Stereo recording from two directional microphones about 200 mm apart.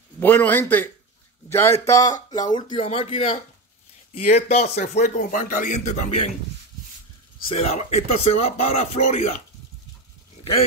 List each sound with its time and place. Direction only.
0.2 s speech: 10° left (ahead or behind); by 6.3 s 35° left (ahead or behind)
7.4 s speech: 30° left (ahead or behind)